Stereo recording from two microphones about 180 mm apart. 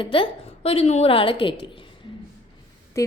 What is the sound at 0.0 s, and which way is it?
A woman's voice, 30° left (ahead or behind).